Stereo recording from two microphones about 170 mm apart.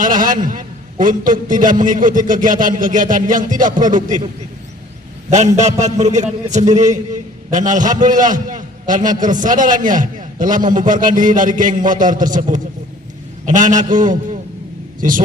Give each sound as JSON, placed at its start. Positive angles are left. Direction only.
{"t": 0.0, "sound": "a man's voice", "side_deg": -50}
{"t": 5.5, "sound": "a man's voice", "side_deg": -45}